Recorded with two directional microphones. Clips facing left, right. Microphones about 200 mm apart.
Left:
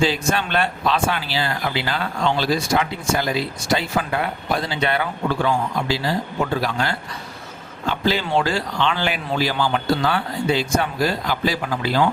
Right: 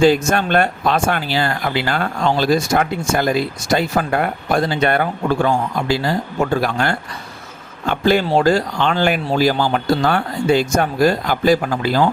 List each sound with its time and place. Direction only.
0.0 s speech: 45° right (ahead or behind)